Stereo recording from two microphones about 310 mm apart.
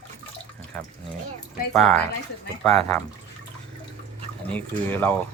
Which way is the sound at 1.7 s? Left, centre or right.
Centre.